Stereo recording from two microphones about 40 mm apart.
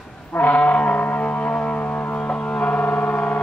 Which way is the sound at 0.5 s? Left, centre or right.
Left.